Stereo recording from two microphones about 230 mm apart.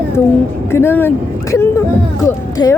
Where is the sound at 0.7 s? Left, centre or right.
Centre.